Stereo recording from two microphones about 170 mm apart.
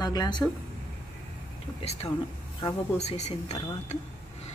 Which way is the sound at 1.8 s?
35° left (ahead or behind).